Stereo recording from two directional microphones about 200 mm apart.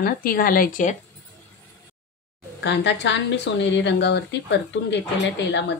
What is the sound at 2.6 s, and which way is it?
Speech, 60° left (ahead or behind).